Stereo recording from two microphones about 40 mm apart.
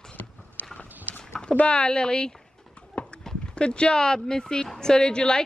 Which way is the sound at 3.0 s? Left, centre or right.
Left.